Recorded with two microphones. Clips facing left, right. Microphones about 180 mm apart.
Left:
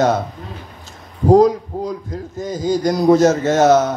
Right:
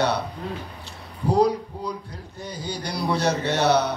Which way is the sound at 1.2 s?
45° left (ahead or behind).